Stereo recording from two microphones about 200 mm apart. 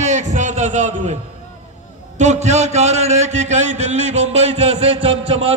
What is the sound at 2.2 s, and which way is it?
A man's voice, 35° right (ahead or behind).